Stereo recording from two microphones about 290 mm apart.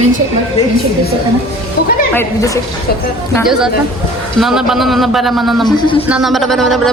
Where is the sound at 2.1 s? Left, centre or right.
Centre.